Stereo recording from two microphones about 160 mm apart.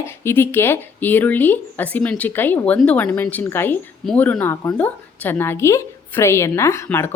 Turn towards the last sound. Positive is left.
turn(degrees=15)  # may be behind; listen again after turning